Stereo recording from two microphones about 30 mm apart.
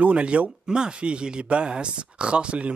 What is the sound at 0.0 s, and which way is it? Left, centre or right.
Speech, right.